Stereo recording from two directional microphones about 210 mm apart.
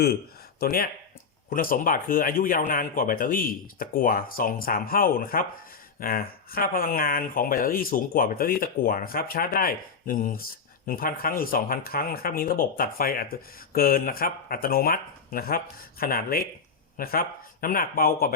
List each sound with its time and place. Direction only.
0.6 s speech: 45° left (ahead or behind)